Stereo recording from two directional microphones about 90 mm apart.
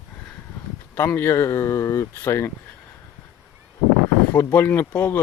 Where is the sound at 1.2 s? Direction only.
30° left (ahead or behind).